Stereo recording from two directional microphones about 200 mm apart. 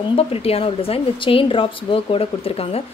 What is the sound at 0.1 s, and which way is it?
A woman's voice, 30° left (ahead or behind).